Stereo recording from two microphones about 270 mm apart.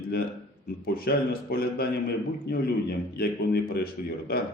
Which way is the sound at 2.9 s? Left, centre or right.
Left.